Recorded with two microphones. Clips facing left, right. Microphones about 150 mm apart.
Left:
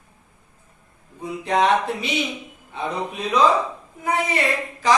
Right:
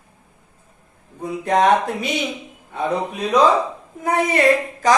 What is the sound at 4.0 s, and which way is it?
Speech, 45° right (ahead or behind).